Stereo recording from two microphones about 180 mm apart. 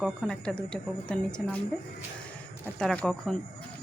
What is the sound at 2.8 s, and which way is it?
Speech, 5° left (ahead or behind).